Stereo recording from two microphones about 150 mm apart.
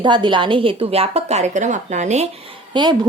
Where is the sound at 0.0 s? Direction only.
30° right (ahead or behind); by 2.3 s 50° right (ahead or behind).